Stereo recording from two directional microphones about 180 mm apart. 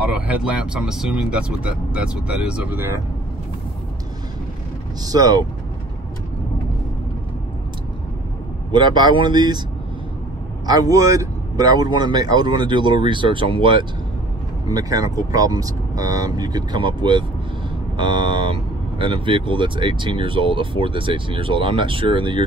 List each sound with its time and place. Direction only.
0.3 s speech: 5° right (ahead or behind)
5.0 s speech: 20° right (ahead or behind)
8.7 s speech: 25° right (ahead or behind)
10.7 s speech: 20° right (ahead or behind)